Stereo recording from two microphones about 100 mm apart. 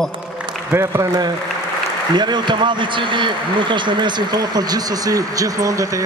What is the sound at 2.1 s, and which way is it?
A man's voice, 50° right (ahead or behind).